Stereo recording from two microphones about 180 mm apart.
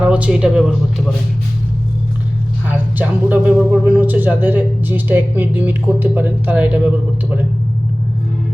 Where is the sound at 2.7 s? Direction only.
10° right (ahead or behind).